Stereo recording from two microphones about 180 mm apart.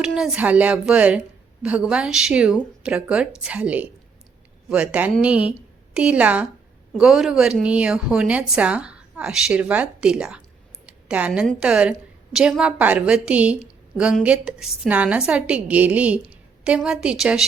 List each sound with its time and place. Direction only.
0.0 s a woman's voice: 5° right (ahead or behind)
10.8 s a sound: 5° right (ahead or behind)
11.4 s a woman's voice: 5° right (ahead or behind)